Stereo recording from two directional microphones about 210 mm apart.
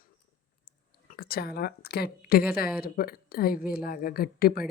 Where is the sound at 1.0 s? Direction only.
45° left (ahead or behind).